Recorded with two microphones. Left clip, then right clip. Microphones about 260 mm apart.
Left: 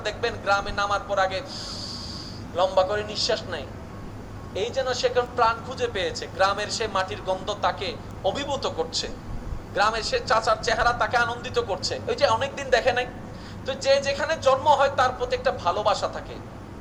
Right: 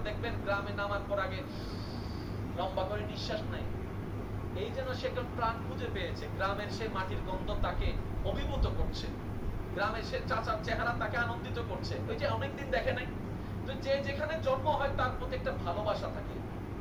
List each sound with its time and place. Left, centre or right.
0.0 s speech: left
2.6 s speech: left